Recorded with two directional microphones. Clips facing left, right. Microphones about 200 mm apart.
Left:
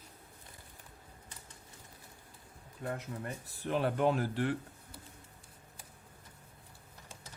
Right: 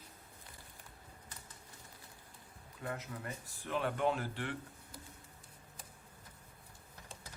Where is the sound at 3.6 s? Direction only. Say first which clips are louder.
Left 4 dB; 35° left (ahead or behind).